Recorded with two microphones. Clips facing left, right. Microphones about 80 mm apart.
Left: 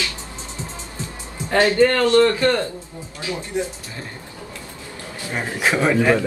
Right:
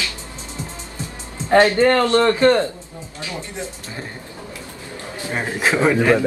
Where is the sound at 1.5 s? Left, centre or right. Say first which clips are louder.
Right 2 dB; right.